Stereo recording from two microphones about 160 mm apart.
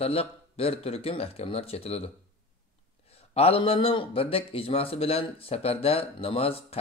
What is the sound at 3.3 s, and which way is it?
Speech, 40° left (ahead or behind).